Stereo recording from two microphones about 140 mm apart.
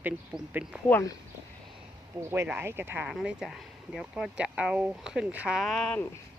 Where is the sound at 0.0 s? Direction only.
10° right (ahead or behind).